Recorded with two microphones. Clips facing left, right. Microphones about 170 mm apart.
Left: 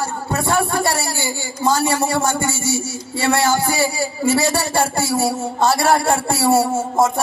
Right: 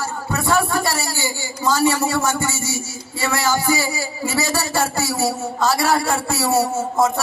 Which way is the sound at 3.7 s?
55° left (ahead or behind).